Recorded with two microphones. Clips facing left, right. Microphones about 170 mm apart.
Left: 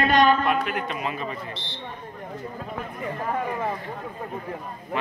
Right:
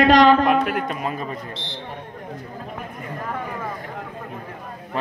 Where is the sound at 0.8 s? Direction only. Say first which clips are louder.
Right 3 dB; 45° right (ahead or behind).